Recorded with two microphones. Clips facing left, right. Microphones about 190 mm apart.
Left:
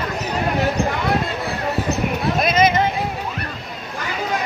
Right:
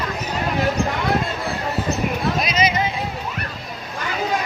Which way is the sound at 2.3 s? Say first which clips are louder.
Left 4 dB; 50° left (ahead or behind).